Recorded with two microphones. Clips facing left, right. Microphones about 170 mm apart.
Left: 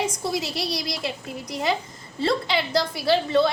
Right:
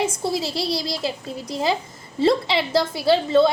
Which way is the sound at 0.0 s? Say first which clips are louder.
Right 3 dB; 30° right (ahead or behind).